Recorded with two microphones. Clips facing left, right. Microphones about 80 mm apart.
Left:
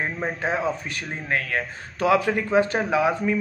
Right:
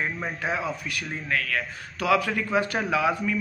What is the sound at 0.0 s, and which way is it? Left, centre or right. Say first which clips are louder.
Speech: left 3 dB; left.